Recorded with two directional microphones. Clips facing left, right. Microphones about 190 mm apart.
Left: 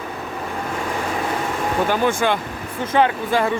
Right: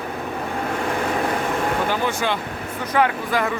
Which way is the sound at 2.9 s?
25° left (ahead or behind).